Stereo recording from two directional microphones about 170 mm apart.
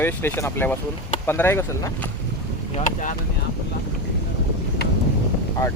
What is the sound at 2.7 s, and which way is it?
Speech, 50° left (ahead or behind).